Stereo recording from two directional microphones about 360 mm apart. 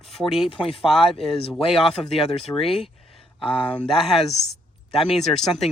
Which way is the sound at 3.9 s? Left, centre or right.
Centre.